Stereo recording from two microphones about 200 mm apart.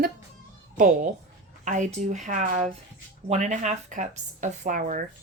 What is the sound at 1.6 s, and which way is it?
Speech, 35° right (ahead or behind).